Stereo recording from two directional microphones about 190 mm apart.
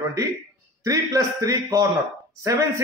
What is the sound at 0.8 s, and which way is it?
A man's voice, 15° right (ahead or behind).